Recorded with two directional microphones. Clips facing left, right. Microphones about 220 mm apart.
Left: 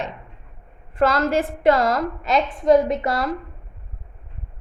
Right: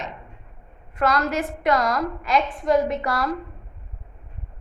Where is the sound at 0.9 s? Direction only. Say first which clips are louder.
Left 4 dB; 30° left (ahead or behind).